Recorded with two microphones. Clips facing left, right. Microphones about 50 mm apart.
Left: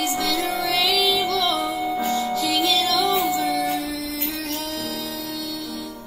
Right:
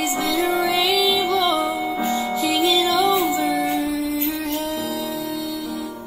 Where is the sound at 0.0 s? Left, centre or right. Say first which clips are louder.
Right 2 dB; right.